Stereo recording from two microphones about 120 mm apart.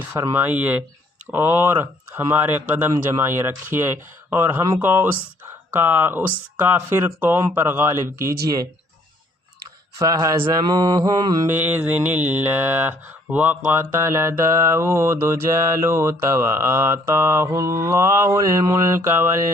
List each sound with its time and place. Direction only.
0.0 s speech: 15° right (ahead or behind)
1.3 s mantra: 15° right (ahead or behind)
10.0 s mantra: 25° right (ahead or behind)
10.7 s mantra: 40° right (ahead or behind)
11.4 s mantra: 15° right (ahead or behind)